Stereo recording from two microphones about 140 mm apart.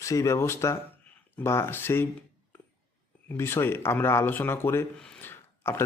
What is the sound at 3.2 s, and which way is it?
Speech, 15° left (ahead or behind).